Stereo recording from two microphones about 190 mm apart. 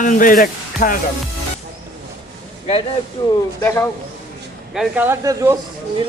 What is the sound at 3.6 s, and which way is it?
Speech, 10° left (ahead or behind).